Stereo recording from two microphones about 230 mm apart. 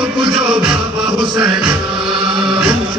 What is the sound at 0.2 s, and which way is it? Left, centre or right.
Music, right.